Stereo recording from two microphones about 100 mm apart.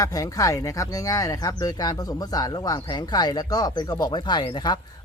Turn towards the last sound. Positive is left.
turn(degrees=50)  # may be behind; listen again after turning